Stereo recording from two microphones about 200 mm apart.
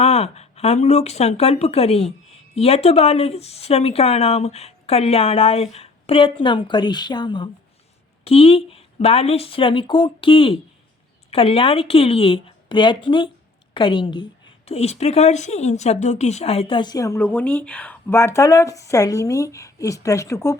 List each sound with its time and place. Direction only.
0.0 s speech: 30° left (ahead or behind); by 20.6 s 15° left (ahead or behind)